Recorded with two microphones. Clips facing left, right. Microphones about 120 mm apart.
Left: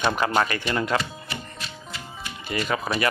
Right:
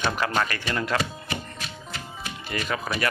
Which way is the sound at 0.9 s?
10° left (ahead or behind).